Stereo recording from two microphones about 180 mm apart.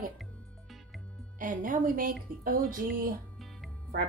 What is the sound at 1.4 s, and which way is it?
Music, 45° right (ahead or behind).